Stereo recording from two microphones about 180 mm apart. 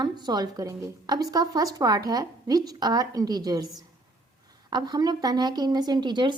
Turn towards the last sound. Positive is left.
turn(degrees=-25)  # may be behind; listen again after turning